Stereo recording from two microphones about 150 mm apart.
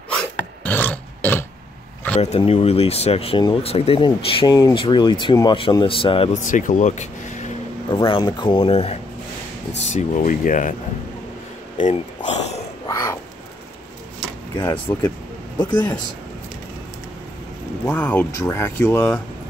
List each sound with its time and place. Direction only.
0.7 s a sound: 10° left (ahead or behind)
2.1 s speech: 45° left (ahead or behind)
6.4 s speech: 55° left (ahead or behind)
7.9 s speech: 35° left (ahead or behind)
9.9 s speech: 60° left (ahead or behind)
11.8 s a sound: 50° left (ahead or behind)
12.8 s crow: 20° left (ahead or behind)
14.6 s speech: 15° left (ahead or behind)
15.5 s a man's voice: 30° left (ahead or behind)
17.8 s speech: 10° left (ahead or behind)